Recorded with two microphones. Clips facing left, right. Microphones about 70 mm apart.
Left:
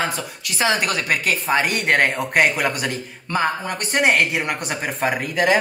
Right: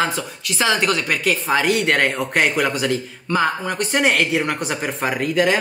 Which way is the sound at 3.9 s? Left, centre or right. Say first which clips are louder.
Even; centre.